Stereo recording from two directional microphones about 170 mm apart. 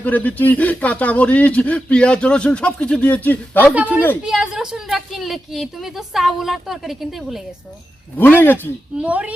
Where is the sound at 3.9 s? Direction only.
10° left (ahead or behind).